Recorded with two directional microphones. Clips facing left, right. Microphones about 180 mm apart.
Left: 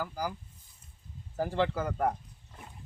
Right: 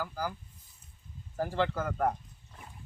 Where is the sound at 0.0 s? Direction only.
10° left (ahead or behind).